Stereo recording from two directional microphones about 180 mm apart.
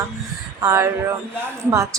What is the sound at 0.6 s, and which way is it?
Speech, 15° right (ahead or behind).